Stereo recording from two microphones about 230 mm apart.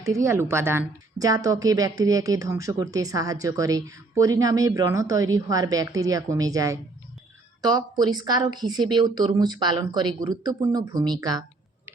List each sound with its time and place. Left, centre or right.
0.0 s a woman's voice: centre